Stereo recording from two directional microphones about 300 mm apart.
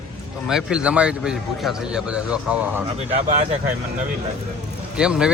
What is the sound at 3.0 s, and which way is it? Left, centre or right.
Speech, right.